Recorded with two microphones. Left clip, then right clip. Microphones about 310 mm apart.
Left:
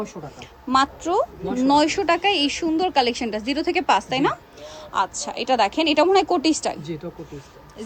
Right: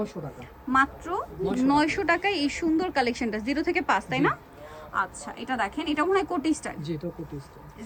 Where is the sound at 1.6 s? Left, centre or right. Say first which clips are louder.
Left 6 dB; centre.